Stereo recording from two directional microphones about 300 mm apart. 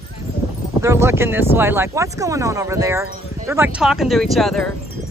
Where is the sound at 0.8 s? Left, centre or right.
Centre.